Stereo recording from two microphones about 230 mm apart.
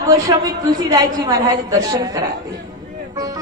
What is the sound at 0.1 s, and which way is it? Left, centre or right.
A woman's voice, centre.